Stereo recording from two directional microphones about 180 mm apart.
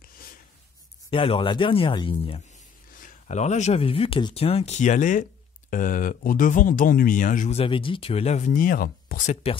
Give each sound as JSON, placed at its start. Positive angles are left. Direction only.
{"t": 1.1, "sound": "speech", "side_deg": 30}
{"t": 2.9, "sound": "speech", "side_deg": 45}
{"t": 9.3, "sound": "speech", "side_deg": 35}